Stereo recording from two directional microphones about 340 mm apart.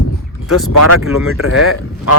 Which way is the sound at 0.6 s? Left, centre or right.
Left.